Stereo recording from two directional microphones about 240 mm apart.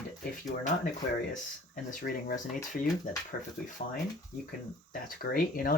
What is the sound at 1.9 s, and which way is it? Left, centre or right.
Speech, left.